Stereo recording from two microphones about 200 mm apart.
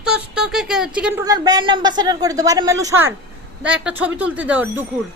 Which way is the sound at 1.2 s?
20° right (ahead or behind).